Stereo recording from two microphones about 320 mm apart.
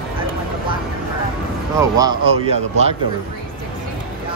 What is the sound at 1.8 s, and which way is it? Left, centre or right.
Speech, centre.